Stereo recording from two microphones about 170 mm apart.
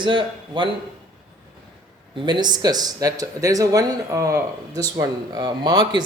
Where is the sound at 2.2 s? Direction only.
25° right (ahead or behind).